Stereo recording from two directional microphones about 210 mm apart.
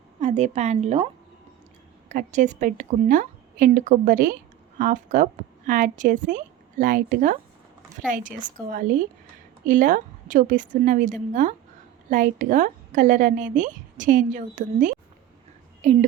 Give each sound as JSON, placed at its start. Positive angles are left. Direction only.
{"t": 0.2, "sound": "a woman's voice", "side_deg": -35}
{"t": 9.6, "sound": "a woman's voice", "side_deg": -40}